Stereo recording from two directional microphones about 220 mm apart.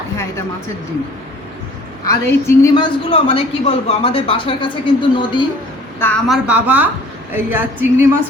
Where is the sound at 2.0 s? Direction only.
15° left (ahead or behind).